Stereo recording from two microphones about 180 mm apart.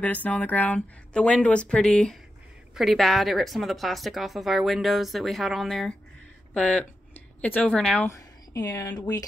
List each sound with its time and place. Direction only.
0.0 s a woman's voice: 10° left (ahead or behind)
8.5 s speech: 20° left (ahead or behind)